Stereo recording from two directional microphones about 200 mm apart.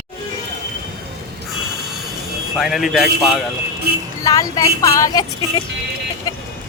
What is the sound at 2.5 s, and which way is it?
Speech, centre (ahead or behind).